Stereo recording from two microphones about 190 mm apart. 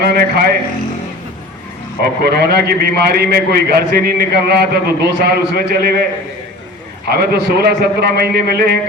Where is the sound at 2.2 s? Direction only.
55° right (ahead or behind).